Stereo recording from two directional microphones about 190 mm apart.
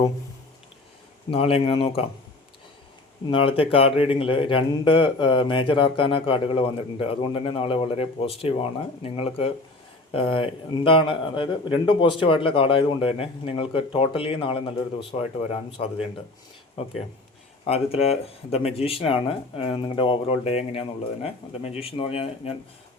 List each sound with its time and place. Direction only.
1.3 s speech: 30° left (ahead or behind)
3.2 s speech: 25° left (ahead or behind)
17.7 s speech: 30° left (ahead or behind)